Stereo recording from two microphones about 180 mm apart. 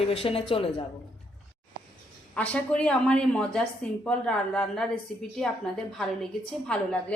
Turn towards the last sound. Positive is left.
turn(degrees=5)  # may be behind; listen again after turning